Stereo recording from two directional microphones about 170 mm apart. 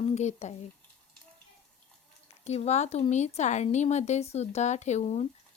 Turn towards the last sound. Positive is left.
turn(degrees=40)  # may be behind; listen again after turning